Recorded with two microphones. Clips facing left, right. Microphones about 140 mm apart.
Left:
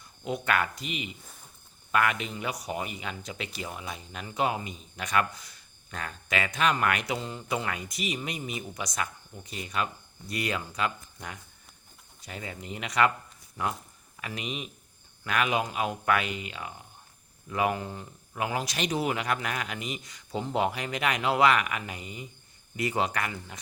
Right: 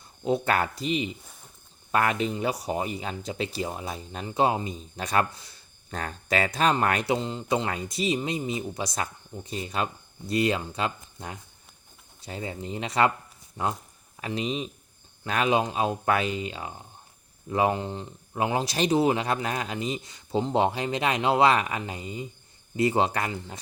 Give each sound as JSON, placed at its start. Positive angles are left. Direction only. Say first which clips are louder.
{"t": 0.3, "sound": "speech", "louder": "right 4 dB", "side_deg": -35}